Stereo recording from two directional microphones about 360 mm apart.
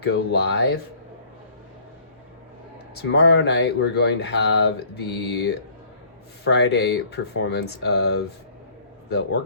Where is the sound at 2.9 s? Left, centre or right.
Left.